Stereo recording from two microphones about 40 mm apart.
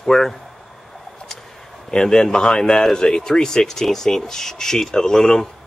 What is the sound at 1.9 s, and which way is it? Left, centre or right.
Speech, centre.